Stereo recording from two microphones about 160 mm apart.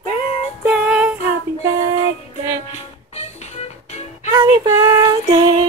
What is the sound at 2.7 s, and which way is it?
Music, 45° left (ahead or behind).